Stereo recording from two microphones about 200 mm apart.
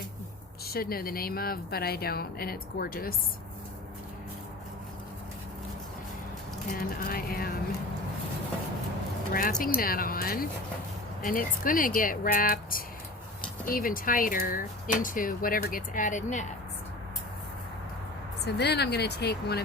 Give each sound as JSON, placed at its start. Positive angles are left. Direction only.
{"t": 0.7, "sound": "speech", "side_deg": 50}
{"t": 6.7, "sound": "speech", "side_deg": 45}
{"t": 9.3, "sound": "speech", "side_deg": 45}
{"t": 18.4, "sound": "speech", "side_deg": 55}